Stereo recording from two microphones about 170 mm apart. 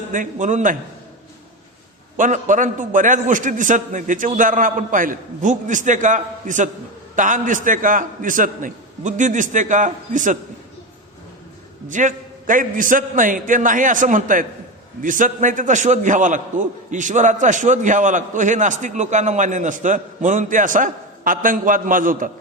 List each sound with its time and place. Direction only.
0.1 s a man's voice: 50° right (ahead or behind)
2.1 s a man's voice: 50° right (ahead or behind)
11.9 s a man's voice: 50° right (ahead or behind)